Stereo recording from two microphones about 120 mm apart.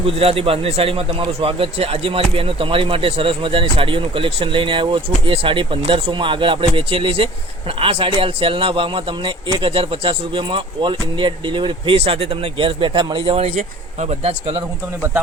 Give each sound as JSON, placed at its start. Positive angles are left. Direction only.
{"t": 0.0, "sound": "speech", "side_deg": -55}
{"t": 13.6, "sound": "speech", "side_deg": -70}